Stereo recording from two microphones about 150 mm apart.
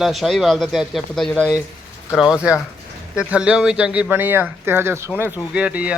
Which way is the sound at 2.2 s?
5° right (ahead or behind).